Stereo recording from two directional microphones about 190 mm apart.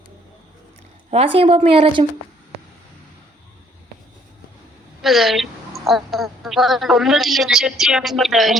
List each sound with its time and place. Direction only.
1.1 s speech: 30° right (ahead or behind)
5.0 s a man's voice: centre (ahead or behind)